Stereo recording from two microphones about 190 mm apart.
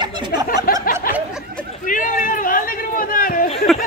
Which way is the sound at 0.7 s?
50° left (ahead or behind).